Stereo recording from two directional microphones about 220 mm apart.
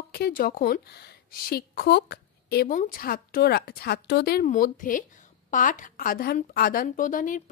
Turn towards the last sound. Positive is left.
turn(degrees=35)  # may be behind; listen again after turning